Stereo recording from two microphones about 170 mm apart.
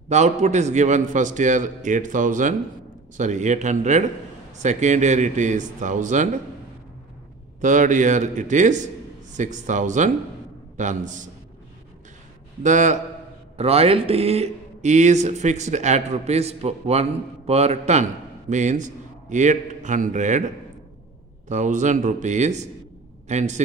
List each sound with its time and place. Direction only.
0.1 s a man's voice: 40° right (ahead or behind)
7.6 s a man's voice: 50° right (ahead or behind)
12.6 s a man's voice: 45° right (ahead or behind)